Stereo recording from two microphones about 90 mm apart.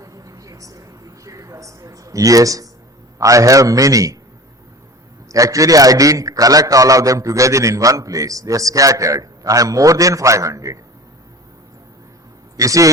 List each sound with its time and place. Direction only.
0.0 s a sound: 40° right (ahead or behind)
3.2 s a man's voice: 40° right (ahead or behind)
5.3 s a man's voice: 40° right (ahead or behind)
12.5 s a man's voice: 40° right (ahead or behind)